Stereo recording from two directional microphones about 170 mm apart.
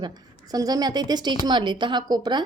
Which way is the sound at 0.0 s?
25° right (ahead or behind).